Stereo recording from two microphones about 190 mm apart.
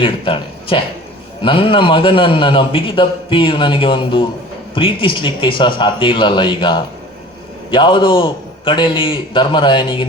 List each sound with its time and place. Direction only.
0.0 s a man's voice: 25° left (ahead or behind)